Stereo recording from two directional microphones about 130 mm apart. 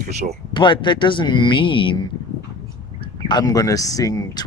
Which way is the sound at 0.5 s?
35° left (ahead or behind).